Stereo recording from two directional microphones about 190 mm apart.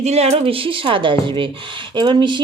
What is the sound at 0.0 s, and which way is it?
Speech, 35° right (ahead or behind).